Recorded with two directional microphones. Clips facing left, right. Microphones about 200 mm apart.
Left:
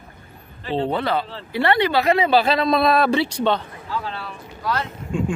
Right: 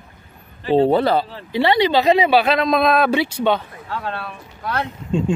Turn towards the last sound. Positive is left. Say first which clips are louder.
# right 4 dB
turn(degrees=-25)  # may be behind; listen again after turning